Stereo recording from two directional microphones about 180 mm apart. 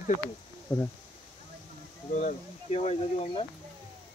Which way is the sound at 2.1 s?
40° left (ahead or behind).